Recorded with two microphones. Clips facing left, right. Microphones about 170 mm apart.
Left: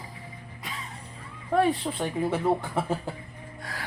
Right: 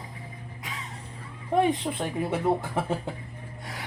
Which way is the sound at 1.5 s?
20° right (ahead or behind).